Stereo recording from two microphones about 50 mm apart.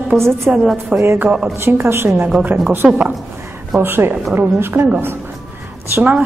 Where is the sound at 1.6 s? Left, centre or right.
Right.